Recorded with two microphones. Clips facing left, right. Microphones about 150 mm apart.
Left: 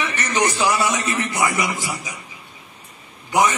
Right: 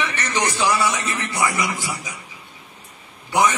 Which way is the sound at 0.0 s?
15° left (ahead or behind).